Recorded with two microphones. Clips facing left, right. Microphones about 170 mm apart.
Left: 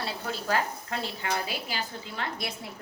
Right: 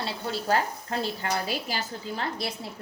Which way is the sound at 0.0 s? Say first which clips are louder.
Right 2 dB; 30° right (ahead or behind).